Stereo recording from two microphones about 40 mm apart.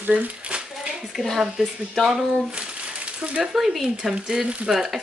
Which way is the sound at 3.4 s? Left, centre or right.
Centre.